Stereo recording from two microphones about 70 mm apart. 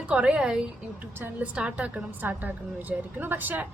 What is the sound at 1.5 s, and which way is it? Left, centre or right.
A woman's voice, centre.